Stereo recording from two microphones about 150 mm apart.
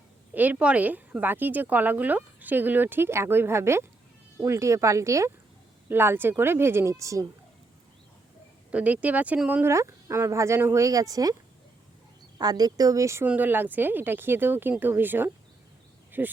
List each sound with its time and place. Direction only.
0.3 s speech: 10° right (ahead or behind)
8.7 s speech: 10° right (ahead or behind)
12.4 s speech: 25° right (ahead or behind)